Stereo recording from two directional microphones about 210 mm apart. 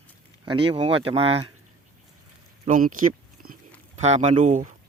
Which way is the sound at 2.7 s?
40° right (ahead or behind).